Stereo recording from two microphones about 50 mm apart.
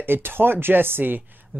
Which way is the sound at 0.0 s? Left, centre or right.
Right.